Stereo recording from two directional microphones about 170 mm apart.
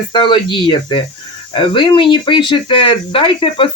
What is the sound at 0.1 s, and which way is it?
Speech, 30° left (ahead or behind).